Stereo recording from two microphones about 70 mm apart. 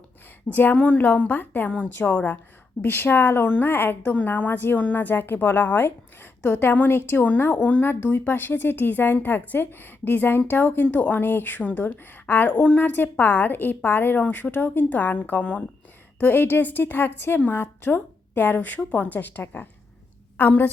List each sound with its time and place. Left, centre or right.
0.5 s a woman's voice: left